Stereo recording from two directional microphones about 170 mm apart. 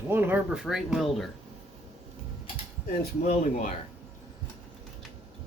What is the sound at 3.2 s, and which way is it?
Speech, 45° left (ahead or behind).